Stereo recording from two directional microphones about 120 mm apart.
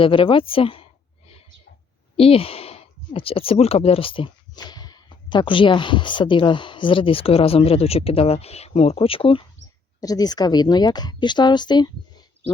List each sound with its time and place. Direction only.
0.0 s speech: 45° left (ahead or behind)
2.1 s speech: 55° left (ahead or behind)
10.0 s a woman's voice: 30° left (ahead or behind)